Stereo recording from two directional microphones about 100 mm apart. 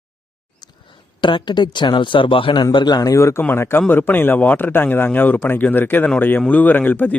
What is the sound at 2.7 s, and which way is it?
A man's voice, 45° left (ahead or behind).